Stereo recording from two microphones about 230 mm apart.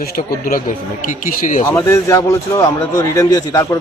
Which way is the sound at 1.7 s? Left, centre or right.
Centre.